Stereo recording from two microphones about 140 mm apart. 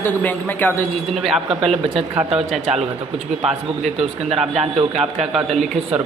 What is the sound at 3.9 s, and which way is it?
Speech, 45° right (ahead or behind).